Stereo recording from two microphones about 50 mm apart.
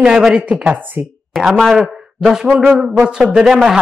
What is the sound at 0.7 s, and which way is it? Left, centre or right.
Speech, right.